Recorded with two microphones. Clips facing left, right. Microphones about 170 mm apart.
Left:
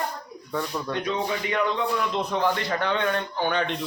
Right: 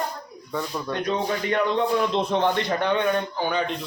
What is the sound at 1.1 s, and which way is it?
A man's voice, 35° right (ahead or behind).